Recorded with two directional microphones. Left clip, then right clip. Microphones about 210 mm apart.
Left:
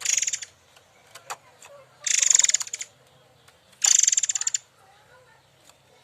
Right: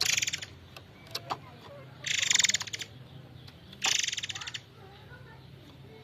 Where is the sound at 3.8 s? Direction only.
15° left (ahead or behind).